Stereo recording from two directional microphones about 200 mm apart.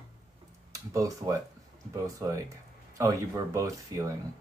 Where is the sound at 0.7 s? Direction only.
15° right (ahead or behind).